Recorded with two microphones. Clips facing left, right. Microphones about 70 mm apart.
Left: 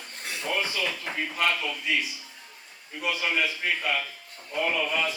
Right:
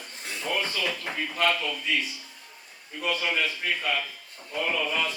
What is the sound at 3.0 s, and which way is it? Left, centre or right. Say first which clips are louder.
A man's voice: even; centre.